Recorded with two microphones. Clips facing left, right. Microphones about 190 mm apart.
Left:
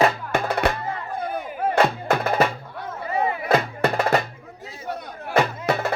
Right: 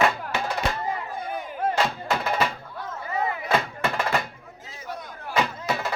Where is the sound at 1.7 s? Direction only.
55° left (ahead or behind).